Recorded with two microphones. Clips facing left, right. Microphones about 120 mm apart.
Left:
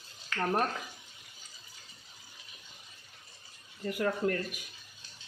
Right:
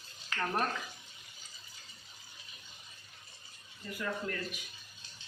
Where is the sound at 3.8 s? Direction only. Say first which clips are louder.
Left 8 dB; 65° left (ahead or behind).